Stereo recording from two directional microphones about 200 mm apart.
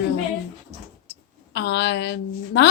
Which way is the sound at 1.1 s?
55° left (ahead or behind).